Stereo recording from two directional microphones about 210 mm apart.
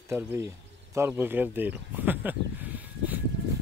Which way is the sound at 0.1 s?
10° right (ahead or behind).